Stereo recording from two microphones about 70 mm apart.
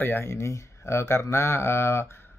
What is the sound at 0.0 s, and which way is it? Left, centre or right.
Speech, left.